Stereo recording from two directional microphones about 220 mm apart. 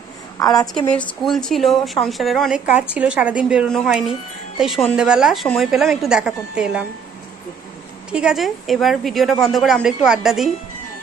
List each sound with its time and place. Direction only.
0.3 s a woman's voice: 15° left (ahead or behind)
0.7 s a woman's voice: 5° left (ahead or behind)
8.1 s a woman's voice: 5° right (ahead or behind)